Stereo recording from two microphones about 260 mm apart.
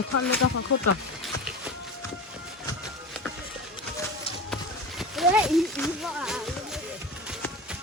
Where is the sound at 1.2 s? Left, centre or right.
Centre.